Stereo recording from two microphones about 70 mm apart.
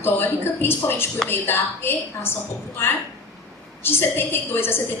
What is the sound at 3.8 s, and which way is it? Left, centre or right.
A woman's voice, left.